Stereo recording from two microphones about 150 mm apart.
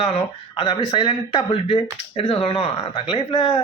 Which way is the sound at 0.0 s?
40° left (ahead or behind).